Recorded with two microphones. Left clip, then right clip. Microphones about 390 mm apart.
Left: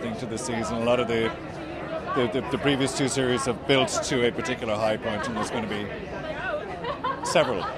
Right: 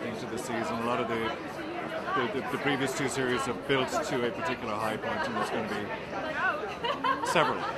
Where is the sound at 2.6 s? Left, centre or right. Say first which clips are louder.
Left 5 dB; left.